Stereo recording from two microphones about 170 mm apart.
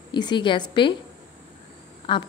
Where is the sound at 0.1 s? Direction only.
25° left (ahead or behind).